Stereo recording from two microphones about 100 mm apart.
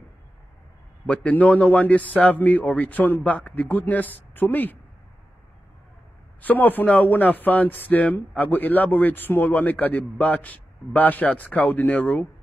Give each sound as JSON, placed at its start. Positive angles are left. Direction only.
{"t": 1.0, "sound": "speech", "side_deg": 15}
{"t": 6.4, "sound": "speech", "side_deg": 15}